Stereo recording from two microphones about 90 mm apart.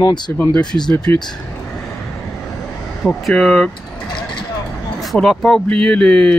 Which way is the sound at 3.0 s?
5° left (ahead or behind).